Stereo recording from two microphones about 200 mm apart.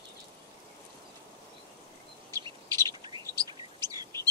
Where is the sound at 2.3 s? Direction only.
20° right (ahead or behind).